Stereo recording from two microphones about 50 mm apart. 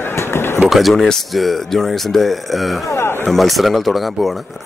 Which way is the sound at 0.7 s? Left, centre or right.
Centre.